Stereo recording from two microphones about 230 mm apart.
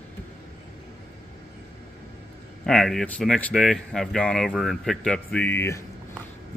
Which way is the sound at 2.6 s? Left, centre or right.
Centre.